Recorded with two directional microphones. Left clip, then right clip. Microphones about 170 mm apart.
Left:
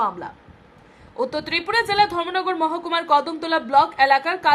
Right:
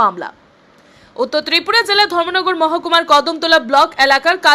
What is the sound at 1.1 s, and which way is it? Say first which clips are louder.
A woman's voice: right 8 dB; 15° right (ahead or behind).